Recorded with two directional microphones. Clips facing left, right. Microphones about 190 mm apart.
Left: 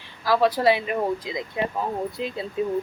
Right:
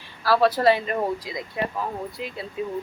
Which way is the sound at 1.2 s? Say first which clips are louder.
Left 2 dB; 20° left (ahead or behind).